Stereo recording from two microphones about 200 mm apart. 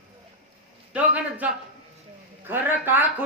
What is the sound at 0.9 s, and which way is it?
Speech, 5° right (ahead or behind).